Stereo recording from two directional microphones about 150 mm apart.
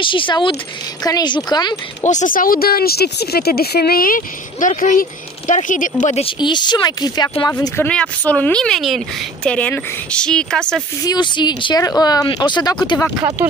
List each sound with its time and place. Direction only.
0.0 s speech: 35° left (ahead or behind)
2.0 s speech: 60° left (ahead or behind)
6.2 s speech: 30° left (ahead or behind)
7.6 s speech: 15° left (ahead or behind)
11.1 s speech: 30° left (ahead or behind)
13.4 s speech: 10° right (ahead or behind)